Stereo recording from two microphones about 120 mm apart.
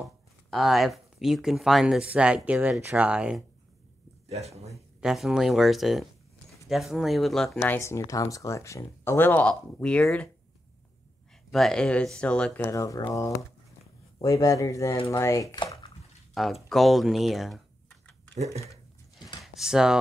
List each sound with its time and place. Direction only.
0.0 s speech: centre (ahead or behind)
4.3 s speech: 60° right (ahead or behind)
5.0 s speech: 5° right (ahead or behind)
7.6 s speech: 20° left (ahead or behind)
11.5 s speech: 5° left (ahead or behind)
12.6 s speech: 30° left (ahead or behind)
16.6 s speech: centre (ahead or behind)
18.3 s speech: 65° right (ahead or behind)
19.1 s computer keyboard: centre (ahead or behind)